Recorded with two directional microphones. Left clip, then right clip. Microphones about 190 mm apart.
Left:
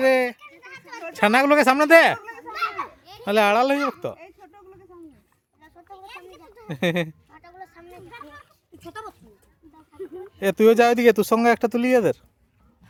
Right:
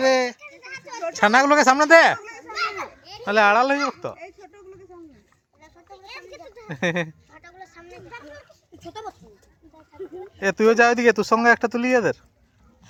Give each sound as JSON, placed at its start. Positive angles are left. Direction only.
{"t": 0.0, "sound": "children playing", "side_deg": 25}
{"t": 1.2, "sound": "speech", "side_deg": 30}
{"t": 2.3, "sound": "children playing", "side_deg": 0}
{"t": 3.2, "sound": "speech", "side_deg": 35}
{"t": 5.6, "sound": "children playing", "side_deg": -5}
{"t": 6.7, "sound": "speech", "side_deg": 35}
{"t": 7.3, "sound": "a sound", "side_deg": 0}
{"t": 10.0, "sound": "a sound", "side_deg": 0}
{"t": 10.4, "sound": "speech", "side_deg": 35}